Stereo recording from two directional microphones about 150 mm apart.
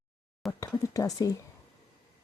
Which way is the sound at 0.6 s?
20° left (ahead or behind).